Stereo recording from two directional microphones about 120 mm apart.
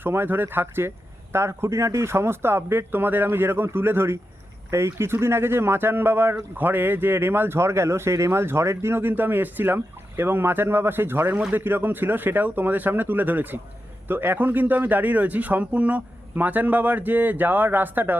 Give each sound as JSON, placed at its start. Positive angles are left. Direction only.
{"t": 0.0, "sound": "speech", "side_deg": -20}